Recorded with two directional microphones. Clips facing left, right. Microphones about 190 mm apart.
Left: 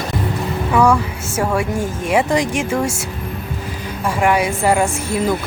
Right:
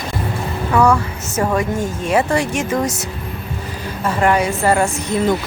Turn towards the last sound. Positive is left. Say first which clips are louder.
# right 1 dB
turn(degrees=10)  # may be behind; listen again after turning